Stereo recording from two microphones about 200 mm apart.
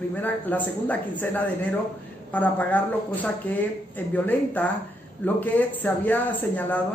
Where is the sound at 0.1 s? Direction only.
10° left (ahead or behind).